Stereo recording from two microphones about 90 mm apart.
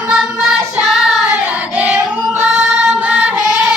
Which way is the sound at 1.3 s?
15° right (ahead or behind).